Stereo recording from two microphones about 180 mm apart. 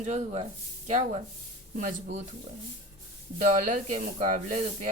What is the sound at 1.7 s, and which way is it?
Speech, 55° right (ahead or behind).